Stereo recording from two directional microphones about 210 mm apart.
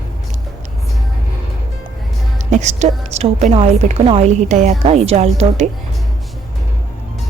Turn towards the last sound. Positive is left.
turn(degrees=-30)  # may be behind; listen again after turning